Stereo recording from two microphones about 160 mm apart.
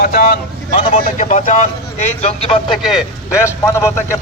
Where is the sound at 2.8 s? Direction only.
Centre (ahead or behind).